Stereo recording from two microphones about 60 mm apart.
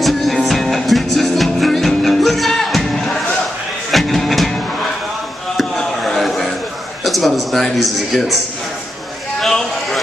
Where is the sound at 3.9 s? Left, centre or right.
Centre.